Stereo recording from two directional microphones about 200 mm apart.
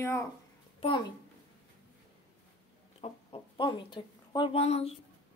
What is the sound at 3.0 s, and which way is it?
Speech, 25° left (ahead or behind).